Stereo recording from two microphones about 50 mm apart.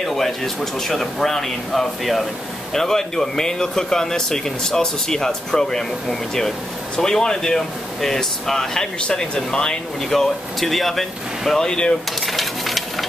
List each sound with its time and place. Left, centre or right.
0.0 s speech: centre
10.0 s speech: centre
12.2 s a sound: centre